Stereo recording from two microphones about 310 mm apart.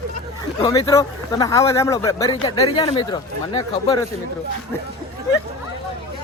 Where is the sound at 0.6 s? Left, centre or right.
Centre.